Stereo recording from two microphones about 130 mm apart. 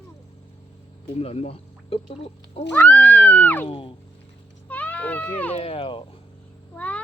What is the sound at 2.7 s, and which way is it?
Speech, 15° left (ahead or behind).